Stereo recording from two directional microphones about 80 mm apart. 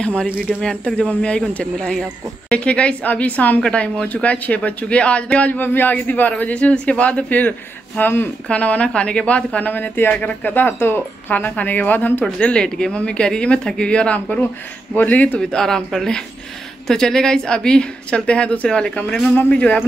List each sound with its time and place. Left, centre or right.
0.0 s a woman's voice: centre
15.5 s a woman's voice: centre